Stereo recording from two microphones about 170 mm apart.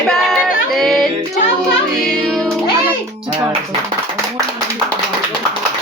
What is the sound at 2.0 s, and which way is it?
Music, centre (ahead or behind).